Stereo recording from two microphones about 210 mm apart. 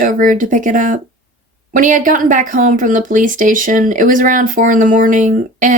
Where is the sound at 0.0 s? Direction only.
40° right (ahead or behind).